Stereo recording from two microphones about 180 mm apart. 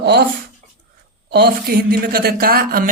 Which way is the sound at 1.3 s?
60° right (ahead or behind).